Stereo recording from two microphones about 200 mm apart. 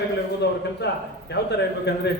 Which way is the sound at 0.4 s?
55° left (ahead or behind).